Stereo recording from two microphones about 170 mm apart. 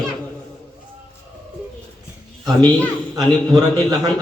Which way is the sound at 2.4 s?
25° right (ahead or behind).